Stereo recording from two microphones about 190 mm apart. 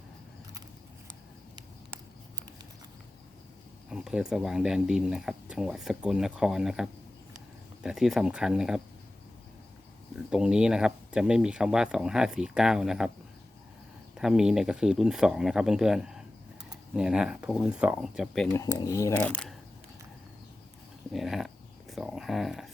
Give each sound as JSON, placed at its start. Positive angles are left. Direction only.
{"t": 3.8, "sound": "speech", "side_deg": -5}
{"t": 10.2, "sound": "speech", "side_deg": -5}
{"t": 14.2, "sound": "speech", "side_deg": -5}
{"t": 18.5, "sound": "speech", "side_deg": 20}
{"t": 21.1, "sound": "speech", "side_deg": 0}